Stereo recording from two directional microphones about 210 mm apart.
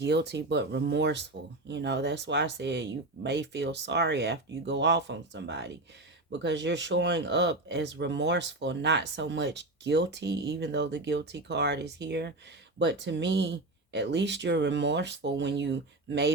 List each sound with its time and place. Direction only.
0.0 s speech: 55° right (ahead or behind)